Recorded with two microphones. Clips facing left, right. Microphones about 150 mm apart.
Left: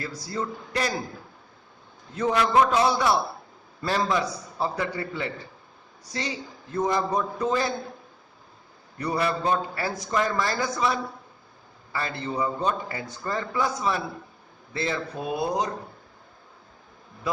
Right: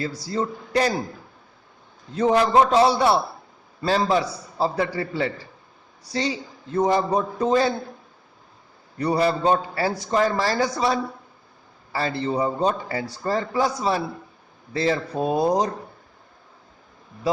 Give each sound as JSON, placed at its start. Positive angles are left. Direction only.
{"t": 0.0, "sound": "a man's voice", "side_deg": -30}
{"t": 2.1, "sound": "a man's voice", "side_deg": -30}
{"t": 9.0, "sound": "a man's voice", "side_deg": -35}